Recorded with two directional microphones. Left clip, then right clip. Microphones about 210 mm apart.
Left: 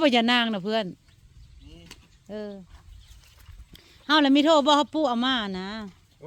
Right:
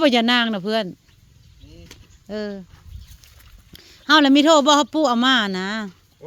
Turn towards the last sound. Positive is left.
turn(degrees=-30)  # may be behind; listen again after turning